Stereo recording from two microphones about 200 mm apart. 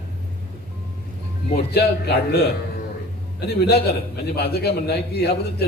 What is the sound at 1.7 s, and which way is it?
Speech, 55° left (ahead or behind).